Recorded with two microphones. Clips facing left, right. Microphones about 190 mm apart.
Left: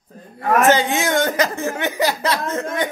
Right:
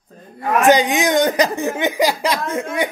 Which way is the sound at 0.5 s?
15° right (ahead or behind).